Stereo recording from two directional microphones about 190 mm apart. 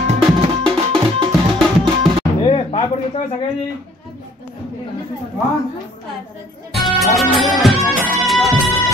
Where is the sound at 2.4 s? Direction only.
30° left (ahead or behind).